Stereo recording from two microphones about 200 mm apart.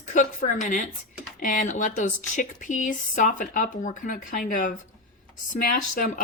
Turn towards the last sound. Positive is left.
turn(degrees=40)  # may be behind; listen again after turning